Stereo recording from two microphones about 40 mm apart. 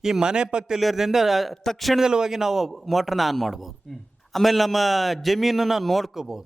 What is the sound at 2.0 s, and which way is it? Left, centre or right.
A man's voice, centre.